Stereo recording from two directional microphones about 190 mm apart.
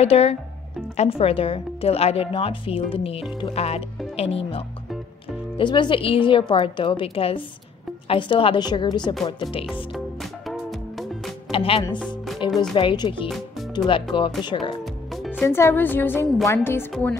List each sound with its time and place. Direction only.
0.0 s a woman's voice: 35° left (ahead or behind)
9.9 s music: centre (ahead or behind)
11.5 s speech: 30° left (ahead or behind)
12.4 s music: 25° left (ahead or behind)
12.7 s a woman's voice: 25° left (ahead or behind)
15.4 s a woman's voice: 15° left (ahead or behind)